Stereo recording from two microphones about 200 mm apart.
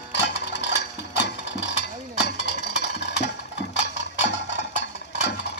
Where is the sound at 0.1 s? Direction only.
60° left (ahead or behind).